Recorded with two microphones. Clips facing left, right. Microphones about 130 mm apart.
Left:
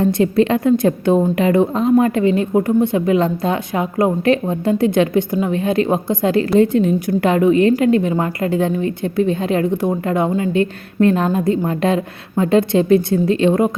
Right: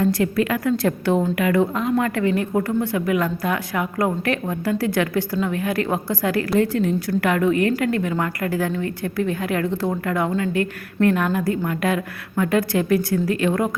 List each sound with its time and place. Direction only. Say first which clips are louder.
0.0 s a woman's voice: left 5 dB; 25° left (ahead or behind)